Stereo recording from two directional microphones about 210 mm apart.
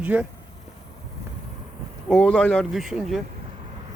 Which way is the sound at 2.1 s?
5° left (ahead or behind).